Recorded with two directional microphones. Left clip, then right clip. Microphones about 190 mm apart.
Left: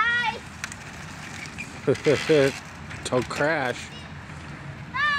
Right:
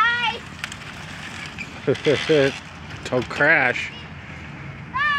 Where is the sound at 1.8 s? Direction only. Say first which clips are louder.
Right 2 dB; centre (ahead or behind).